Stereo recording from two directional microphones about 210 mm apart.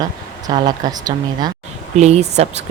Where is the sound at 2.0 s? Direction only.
30° right (ahead or behind).